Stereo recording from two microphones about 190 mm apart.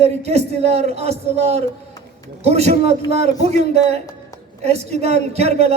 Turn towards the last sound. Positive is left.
turn(degrees=-35)  # may be behind; listen again after turning